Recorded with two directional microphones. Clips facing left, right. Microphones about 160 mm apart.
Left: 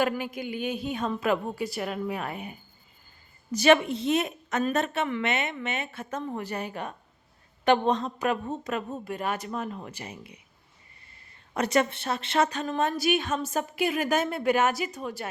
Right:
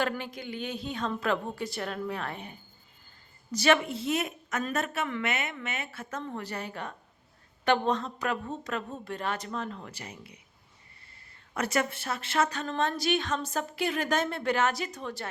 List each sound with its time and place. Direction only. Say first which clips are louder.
0.0 s a woman's voice: left 4 dB; 10° left (ahead or behind)
9.0 s a woman's voice: left 3 dB; 10° left (ahead or behind)
11.5 s a woman's voice: left 5 dB; 20° left (ahead or behind)
12.6 s a woman's voice: left 3 dB; 10° left (ahead or behind)